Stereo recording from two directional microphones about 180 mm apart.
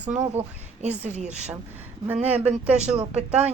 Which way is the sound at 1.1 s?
40° right (ahead or behind).